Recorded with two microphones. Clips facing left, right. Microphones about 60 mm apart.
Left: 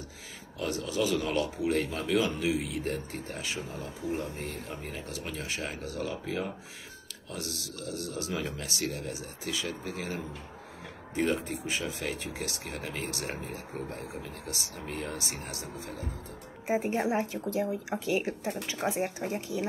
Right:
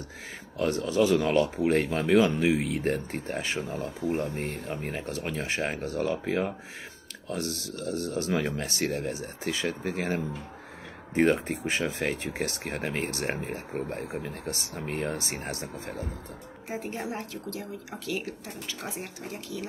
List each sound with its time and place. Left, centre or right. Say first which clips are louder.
0.6 s speech: right 6 dB; right
3.6 s speech: right 5 dB; right
16.6 s speech: left 6 dB; left